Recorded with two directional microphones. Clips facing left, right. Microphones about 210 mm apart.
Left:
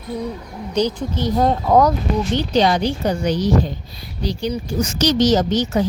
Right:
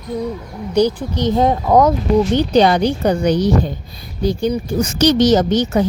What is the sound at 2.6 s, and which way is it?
Speech, 55° right (ahead or behind).